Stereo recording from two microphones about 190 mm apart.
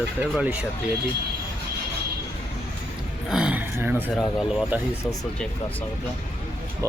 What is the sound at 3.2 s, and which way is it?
Speech, 5° right (ahead or behind).